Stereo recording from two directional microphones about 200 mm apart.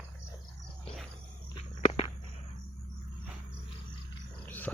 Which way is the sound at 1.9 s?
25° left (ahead or behind).